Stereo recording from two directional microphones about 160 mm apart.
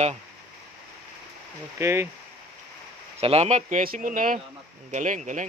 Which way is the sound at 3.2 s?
40° right (ahead or behind).